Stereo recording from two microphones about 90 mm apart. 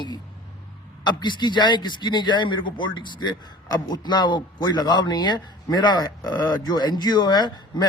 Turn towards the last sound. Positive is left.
turn(degrees=55)  # may be behind; listen again after turning